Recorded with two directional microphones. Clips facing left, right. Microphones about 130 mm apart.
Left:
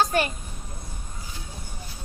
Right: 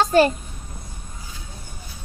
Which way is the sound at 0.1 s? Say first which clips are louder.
Right 9 dB; 30° right (ahead or behind).